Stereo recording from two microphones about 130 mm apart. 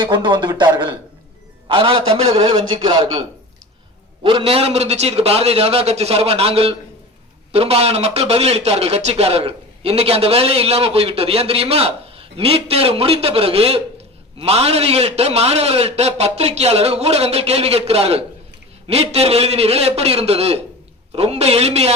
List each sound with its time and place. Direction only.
0.0 s speech: 40° right (ahead or behind)
4.2 s a man's voice: 40° right (ahead or behind)